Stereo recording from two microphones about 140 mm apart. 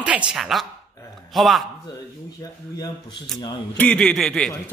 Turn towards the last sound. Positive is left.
turn(degrees=5)  # may be behind; listen again after turning